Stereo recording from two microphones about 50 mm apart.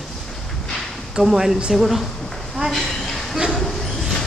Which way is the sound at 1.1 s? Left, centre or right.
Centre.